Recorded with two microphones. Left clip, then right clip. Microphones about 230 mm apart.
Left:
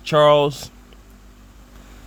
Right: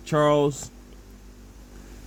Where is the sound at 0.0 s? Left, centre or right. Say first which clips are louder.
Left 7 dB; left.